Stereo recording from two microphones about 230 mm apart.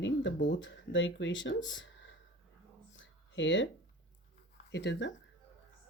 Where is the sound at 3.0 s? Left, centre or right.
Left.